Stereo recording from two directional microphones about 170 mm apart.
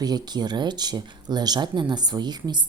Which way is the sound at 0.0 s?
25° right (ahead or behind).